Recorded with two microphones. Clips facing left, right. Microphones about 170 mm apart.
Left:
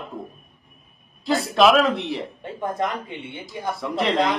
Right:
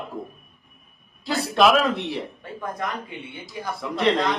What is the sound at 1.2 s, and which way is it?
Speech, centre (ahead or behind).